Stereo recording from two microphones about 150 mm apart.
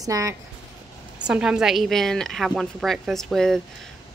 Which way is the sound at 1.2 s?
5° right (ahead or behind).